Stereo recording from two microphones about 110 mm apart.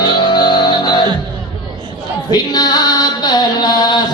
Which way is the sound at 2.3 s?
40° left (ahead or behind).